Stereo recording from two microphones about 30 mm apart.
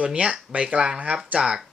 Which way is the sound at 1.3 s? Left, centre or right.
Right.